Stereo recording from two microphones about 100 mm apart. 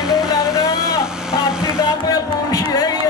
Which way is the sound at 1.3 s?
5° right (ahead or behind).